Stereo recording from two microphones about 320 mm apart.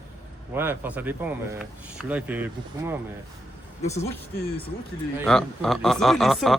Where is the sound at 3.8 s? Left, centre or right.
Centre.